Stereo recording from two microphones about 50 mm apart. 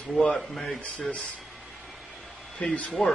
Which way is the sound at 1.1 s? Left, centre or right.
Left.